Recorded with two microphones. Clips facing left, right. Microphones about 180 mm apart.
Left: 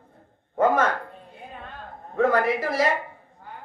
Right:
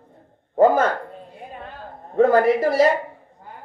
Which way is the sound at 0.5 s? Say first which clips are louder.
Right 5 dB; 30° right (ahead or behind).